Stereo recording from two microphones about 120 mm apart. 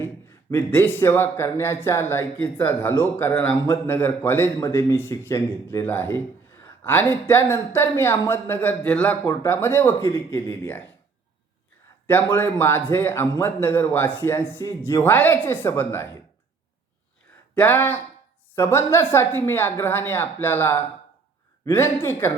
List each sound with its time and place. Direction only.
0.5 s speech: 15° left (ahead or behind)
12.0 s speech: 15° left (ahead or behind)
17.5 s a man's voice: 15° left (ahead or behind)